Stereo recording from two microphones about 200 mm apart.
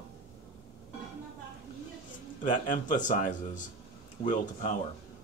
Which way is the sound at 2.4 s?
40° left (ahead or behind).